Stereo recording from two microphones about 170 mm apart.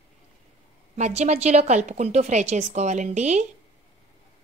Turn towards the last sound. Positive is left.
turn(degrees=-45)  # may be behind; listen again after turning